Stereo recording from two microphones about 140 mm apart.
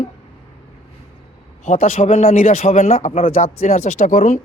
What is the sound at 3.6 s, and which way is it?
Speech, 50° left (ahead or behind).